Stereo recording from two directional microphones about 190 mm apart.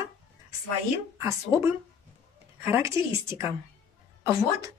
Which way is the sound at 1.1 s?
15° right (ahead or behind).